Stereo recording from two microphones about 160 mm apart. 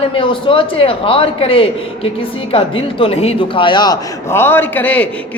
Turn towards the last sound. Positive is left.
turn(degrees=10)  # may be behind; listen again after turning